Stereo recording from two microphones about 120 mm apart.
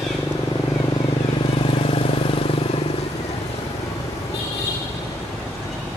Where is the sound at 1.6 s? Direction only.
50° left (ahead or behind).